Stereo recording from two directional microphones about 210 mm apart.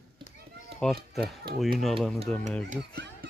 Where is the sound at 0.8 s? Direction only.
Centre (ahead or behind).